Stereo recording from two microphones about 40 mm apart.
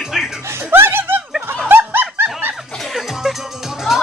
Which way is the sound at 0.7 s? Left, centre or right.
Right.